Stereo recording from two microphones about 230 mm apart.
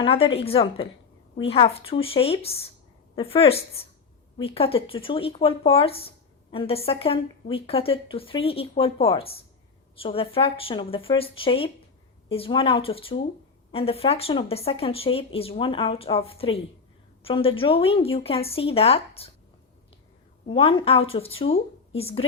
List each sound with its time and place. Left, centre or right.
0.0 s speech: left
20.5 s speech: left